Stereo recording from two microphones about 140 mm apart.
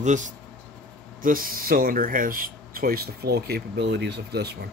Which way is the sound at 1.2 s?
90° right.